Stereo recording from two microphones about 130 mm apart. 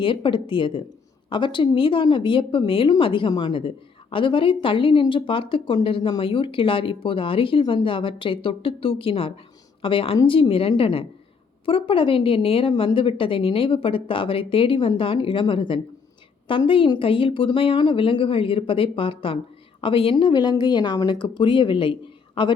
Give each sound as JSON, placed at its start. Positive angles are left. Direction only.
{"t": 0.0, "sound": "a woman's voice", "side_deg": 40}